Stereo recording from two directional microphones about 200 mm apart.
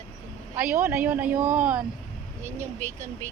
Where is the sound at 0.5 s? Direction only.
5° right (ahead or behind).